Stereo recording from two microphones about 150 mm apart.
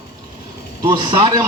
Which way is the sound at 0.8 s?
30° right (ahead or behind).